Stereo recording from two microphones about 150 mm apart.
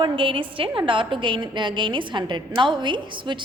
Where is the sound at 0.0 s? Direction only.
35° right (ahead or behind).